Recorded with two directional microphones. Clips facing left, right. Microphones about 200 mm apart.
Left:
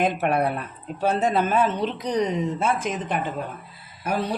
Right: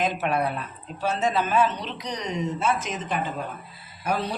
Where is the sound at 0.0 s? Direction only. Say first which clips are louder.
Left 3 dB; 60° left (ahead or behind).